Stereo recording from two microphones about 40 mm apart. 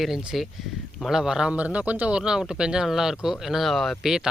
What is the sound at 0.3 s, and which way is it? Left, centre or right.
Speech, centre.